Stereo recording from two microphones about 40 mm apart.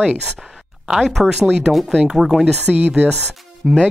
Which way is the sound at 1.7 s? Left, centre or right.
Right.